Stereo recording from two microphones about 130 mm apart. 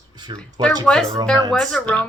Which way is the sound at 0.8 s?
5° left (ahead or behind).